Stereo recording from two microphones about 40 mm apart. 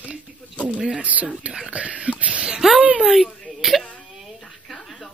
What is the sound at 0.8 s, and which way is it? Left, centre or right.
Speech, right.